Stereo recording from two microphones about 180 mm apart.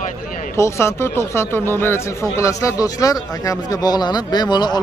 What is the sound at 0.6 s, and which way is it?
Speech, 15° left (ahead or behind).